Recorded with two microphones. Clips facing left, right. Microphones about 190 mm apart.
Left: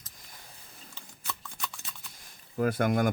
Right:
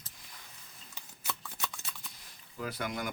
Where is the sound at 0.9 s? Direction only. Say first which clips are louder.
Even; 5° right (ahead or behind).